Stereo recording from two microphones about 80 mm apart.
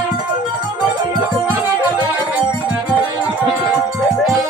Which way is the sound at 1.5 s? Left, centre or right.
Centre.